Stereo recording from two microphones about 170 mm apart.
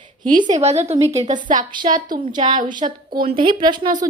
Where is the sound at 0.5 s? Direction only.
40° right (ahead or behind).